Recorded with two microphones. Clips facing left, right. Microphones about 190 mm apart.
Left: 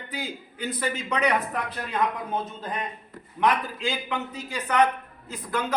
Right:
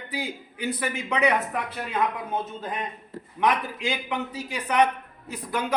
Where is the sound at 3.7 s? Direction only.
15° right (ahead or behind).